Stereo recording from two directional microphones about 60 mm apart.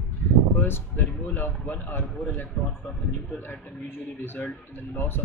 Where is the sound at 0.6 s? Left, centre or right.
Left.